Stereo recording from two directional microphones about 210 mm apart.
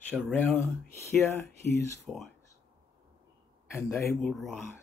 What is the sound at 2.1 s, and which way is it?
Speech, centre (ahead or behind).